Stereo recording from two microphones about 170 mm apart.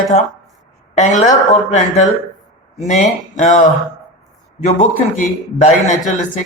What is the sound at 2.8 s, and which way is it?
A man's voice, 45° left (ahead or behind).